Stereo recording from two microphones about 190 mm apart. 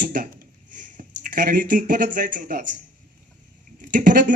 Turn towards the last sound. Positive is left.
turn(degrees=-45)  # may be behind; listen again after turning